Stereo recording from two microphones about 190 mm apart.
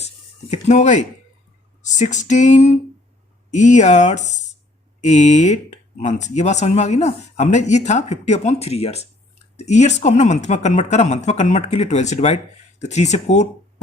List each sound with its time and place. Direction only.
0.5 s speech: 40° left (ahead or behind)